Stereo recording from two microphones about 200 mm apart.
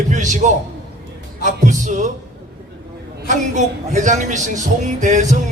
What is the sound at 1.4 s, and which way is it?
Speech, 40° right (ahead or behind).